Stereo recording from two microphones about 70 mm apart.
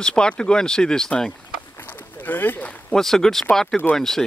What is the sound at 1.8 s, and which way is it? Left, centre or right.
Boat, left.